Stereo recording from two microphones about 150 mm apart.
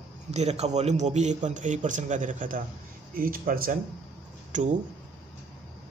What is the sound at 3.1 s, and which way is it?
Speech, 70° right (ahead or behind).